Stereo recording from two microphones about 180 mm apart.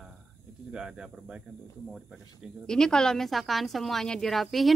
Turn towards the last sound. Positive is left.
turn(degrees=0)  # may be behind; listen again after turning